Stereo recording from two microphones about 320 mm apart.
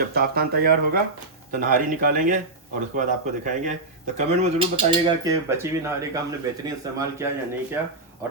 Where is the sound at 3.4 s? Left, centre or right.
Right; by 7.9 s centre.